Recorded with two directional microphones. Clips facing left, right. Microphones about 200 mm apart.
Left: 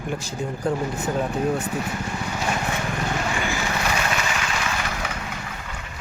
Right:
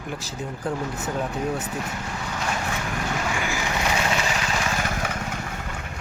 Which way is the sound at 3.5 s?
15° right (ahead or behind).